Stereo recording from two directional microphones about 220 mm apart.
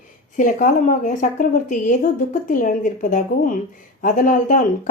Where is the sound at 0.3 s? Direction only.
35° left (ahead or behind).